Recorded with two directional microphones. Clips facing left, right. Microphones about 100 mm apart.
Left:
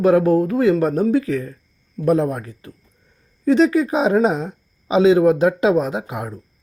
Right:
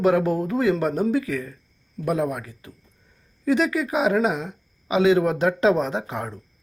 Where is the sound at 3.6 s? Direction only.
25° left (ahead or behind).